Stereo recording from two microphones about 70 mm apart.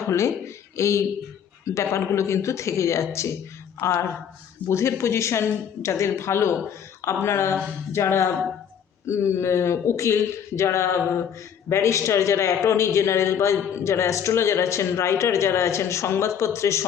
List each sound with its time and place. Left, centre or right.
0.1 s speech: left